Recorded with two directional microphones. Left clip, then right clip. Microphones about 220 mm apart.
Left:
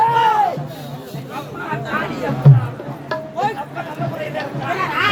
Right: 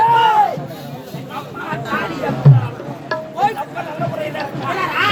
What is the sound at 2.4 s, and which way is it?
Music, centre (ahead or behind).